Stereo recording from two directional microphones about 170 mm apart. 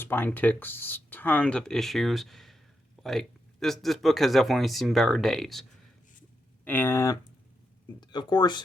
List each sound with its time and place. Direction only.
0.0 s speech: 10° left (ahead or behind)
6.7 s speech: 10° left (ahead or behind)